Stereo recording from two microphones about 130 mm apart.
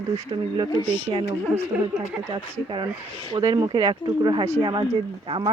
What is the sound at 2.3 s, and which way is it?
Speech, 40° right (ahead or behind).